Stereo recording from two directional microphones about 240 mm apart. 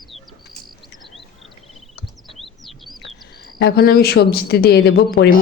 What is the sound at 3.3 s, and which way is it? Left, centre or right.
Speech, left.